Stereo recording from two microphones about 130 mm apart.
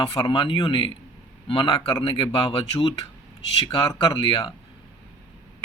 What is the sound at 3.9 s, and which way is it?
Speech, 40° left (ahead or behind).